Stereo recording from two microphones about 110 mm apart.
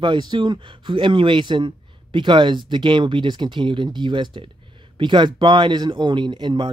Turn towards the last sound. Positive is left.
turn(degrees=-45)  # may be behind; listen again after turning